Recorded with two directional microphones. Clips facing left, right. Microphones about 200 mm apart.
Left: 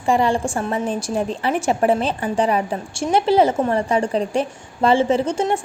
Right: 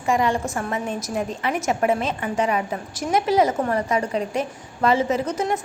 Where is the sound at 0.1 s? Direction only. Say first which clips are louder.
Left 3 dB; 30° left (ahead or behind).